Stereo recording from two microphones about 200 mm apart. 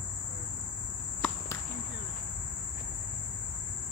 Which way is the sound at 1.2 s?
5° left (ahead or behind).